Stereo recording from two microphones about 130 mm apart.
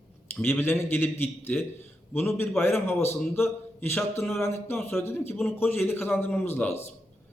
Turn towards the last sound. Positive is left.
turn(degrees=15)  # may be behind; listen again after turning